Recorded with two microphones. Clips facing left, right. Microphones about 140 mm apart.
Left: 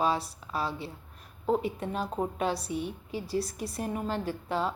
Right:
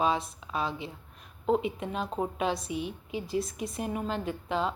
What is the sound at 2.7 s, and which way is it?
A woman's voice, 15° right (ahead or behind).